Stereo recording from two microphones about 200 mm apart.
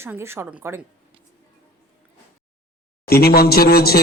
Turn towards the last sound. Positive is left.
turn(degrees=50)  # may be behind; listen again after turning